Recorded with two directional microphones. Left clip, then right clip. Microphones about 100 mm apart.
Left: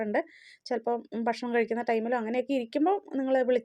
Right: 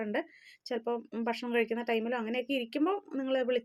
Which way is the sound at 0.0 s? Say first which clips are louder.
Left 5 dB; 25° left (ahead or behind).